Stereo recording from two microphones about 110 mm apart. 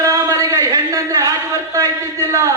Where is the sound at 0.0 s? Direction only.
30° right (ahead or behind).